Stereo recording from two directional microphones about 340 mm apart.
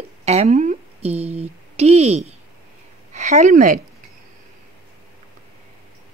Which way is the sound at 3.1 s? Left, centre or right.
Right.